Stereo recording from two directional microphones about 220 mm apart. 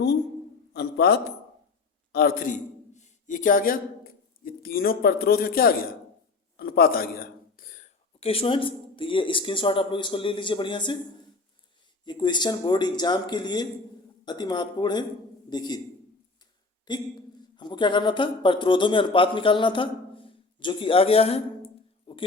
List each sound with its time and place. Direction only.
0.7 s a sound: 45° left (ahead or behind)
2.1 s a man's voice: 40° left (ahead or behind); by 10.9 s 20° left (ahead or behind)
12.0 s a man's voice: 20° left (ahead or behind)
16.9 s a man's voice: 20° left (ahead or behind)